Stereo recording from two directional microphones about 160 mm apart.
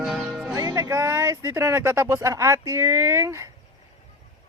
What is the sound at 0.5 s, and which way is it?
Speech, 20° right (ahead or behind).